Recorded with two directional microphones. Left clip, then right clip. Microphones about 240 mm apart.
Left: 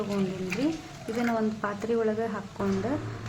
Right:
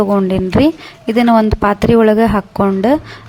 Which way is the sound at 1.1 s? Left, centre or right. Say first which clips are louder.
Right 17 dB; right.